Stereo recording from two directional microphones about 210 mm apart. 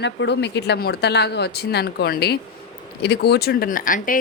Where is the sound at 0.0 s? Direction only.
55° left (ahead or behind).